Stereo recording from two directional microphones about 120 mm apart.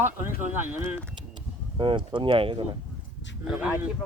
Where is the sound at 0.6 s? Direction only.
15° right (ahead or behind).